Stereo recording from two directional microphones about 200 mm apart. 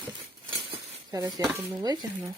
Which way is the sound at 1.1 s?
20° right (ahead or behind).